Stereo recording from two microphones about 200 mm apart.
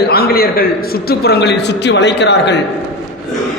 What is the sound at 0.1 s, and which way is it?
A man's voice, 50° left (ahead or behind).